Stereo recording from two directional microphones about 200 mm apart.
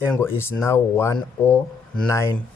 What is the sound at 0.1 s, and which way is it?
Speech, 10° left (ahead or behind).